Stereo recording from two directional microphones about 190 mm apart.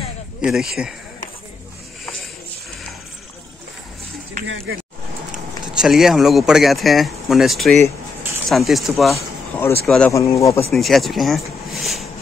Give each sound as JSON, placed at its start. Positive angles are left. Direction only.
{"t": 0.5, "sound": "speech", "side_deg": -5}
{"t": 4.5, "sound": "speech", "side_deg": -85}
{"t": 5.8, "sound": "speech", "side_deg": 0}
{"t": 9.1, "sound": "a sound", "side_deg": 10}
{"t": 9.8, "sound": "speech", "side_deg": 5}
{"t": 10.1, "sound": "speech", "side_deg": 15}
{"t": 10.7, "sound": "speech", "side_deg": 0}